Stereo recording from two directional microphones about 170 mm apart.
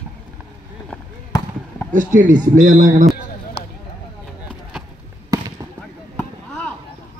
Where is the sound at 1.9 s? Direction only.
50° right (ahead or behind).